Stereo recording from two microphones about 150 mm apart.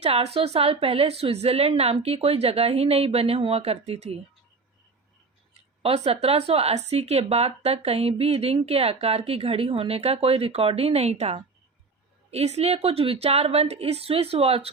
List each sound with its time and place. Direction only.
0.0 s a woman's voice: 45° right (ahead or behind)
5.8 s speech: 45° right (ahead or behind)